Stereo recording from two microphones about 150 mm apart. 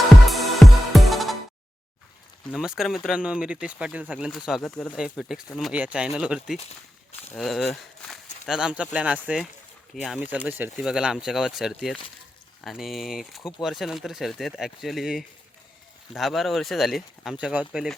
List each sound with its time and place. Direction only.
0.3 s music: centre (ahead or behind)
2.5 s speech: 5° right (ahead or behind)